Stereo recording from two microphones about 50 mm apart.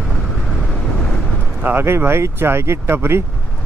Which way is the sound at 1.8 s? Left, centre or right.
Right.